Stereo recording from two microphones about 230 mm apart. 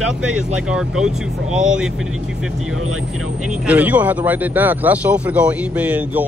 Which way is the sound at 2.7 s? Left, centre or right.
Right.